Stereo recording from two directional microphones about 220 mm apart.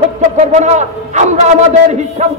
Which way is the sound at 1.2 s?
35° right (ahead or behind).